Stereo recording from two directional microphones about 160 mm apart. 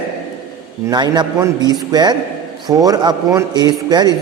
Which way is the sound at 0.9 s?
25° right (ahead or behind).